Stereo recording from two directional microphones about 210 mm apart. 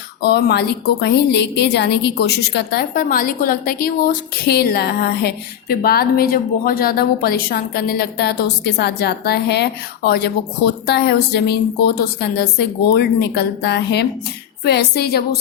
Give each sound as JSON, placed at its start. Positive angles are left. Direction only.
{"t": 0.2, "sound": "a woman's voice", "side_deg": 50}